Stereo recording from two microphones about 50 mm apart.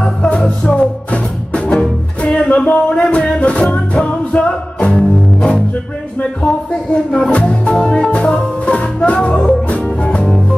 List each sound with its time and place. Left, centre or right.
0.0 s music: centre
6.1 s music: left